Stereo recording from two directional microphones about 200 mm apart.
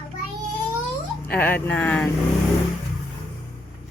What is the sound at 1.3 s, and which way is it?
Speech, 10° left (ahead or behind).